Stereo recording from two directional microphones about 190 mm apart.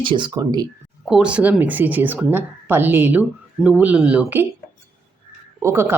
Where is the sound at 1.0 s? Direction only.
5° right (ahead or behind).